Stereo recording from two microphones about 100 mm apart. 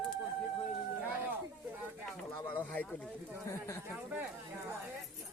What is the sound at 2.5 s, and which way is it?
Speech, 20° left (ahead or behind).